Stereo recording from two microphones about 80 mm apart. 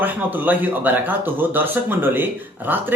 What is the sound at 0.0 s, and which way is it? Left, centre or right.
Speech, right.